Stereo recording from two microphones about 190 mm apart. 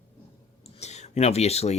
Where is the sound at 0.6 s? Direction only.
35° left (ahead or behind).